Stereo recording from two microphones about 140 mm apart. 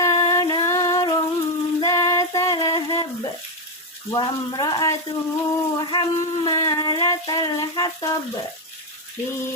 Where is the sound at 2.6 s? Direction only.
25° left (ahead or behind).